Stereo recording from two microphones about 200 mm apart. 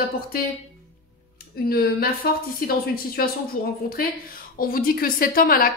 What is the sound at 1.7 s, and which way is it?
A woman's voice, 50° left (ahead or behind).